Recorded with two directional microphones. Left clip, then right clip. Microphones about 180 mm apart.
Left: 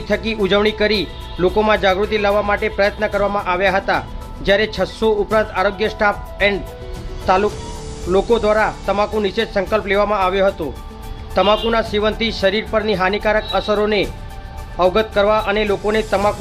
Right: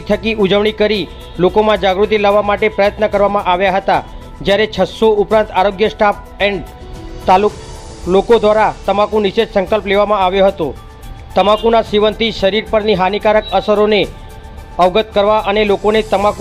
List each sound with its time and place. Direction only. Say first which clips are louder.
0.1 s speech: right 4 dB; 25° right (ahead or behind)